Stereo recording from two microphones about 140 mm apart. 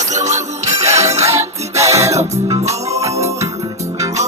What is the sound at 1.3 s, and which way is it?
Music, 20° right (ahead or behind).